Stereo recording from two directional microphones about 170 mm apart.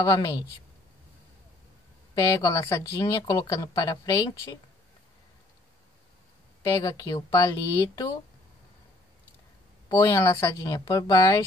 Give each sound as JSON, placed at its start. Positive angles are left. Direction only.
{"t": 0.0, "sound": "speech", "side_deg": 20}
{"t": 2.1, "sound": "speech", "side_deg": 20}
{"t": 6.7, "sound": "speech", "side_deg": 20}
{"t": 9.8, "sound": "speech", "side_deg": 20}